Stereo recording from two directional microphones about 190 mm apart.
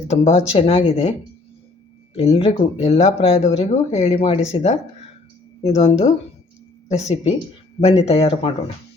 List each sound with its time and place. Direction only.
0.1 s speech: 35° left (ahead or behind)
2.1 s speech: 30° left (ahead or behind)